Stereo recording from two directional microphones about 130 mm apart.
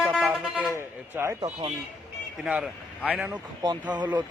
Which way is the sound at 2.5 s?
5° right (ahead or behind).